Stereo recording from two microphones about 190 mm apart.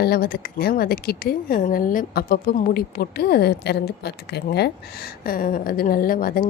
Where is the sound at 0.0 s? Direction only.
55° left (ahead or behind).